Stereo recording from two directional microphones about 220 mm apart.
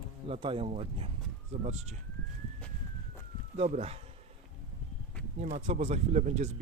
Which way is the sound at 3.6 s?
30° right (ahead or behind).